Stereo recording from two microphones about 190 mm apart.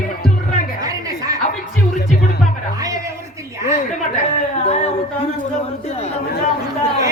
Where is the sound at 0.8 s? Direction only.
20° right (ahead or behind).